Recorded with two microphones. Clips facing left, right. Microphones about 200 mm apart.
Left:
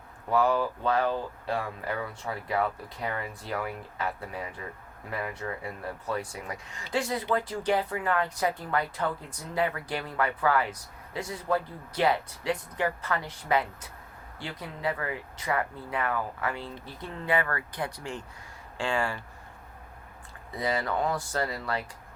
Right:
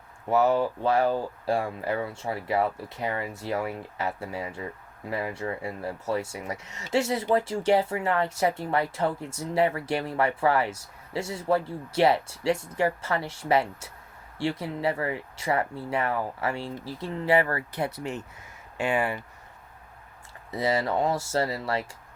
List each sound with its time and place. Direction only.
0.3 s speech: 25° right (ahead or behind)
20.5 s speech: 25° right (ahead or behind)